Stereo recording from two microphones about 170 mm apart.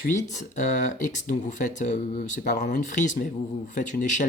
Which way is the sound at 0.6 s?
45° left (ahead or behind).